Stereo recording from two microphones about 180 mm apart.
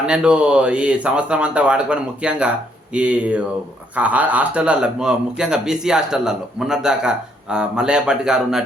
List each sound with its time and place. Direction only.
0.0 s a man's voice: 5° right (ahead or behind)